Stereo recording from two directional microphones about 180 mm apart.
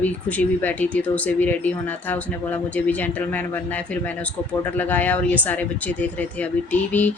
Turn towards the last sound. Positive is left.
turn(degrees=10)  # may be behind; listen again after turning